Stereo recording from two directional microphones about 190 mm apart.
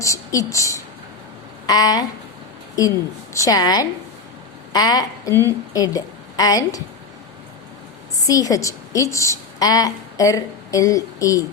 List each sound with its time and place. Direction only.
0.0 s speech: 15° left (ahead or behind)
3.3 s a woman's voice: 20° left (ahead or behind)
8.1 s a woman's voice: 20° left (ahead or behind)